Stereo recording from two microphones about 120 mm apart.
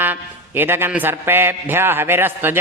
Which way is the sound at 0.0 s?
15° right (ahead or behind).